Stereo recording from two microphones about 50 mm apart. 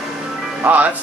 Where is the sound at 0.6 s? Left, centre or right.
Right.